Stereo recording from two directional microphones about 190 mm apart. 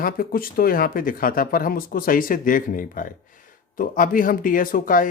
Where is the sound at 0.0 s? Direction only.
50° left (ahead or behind).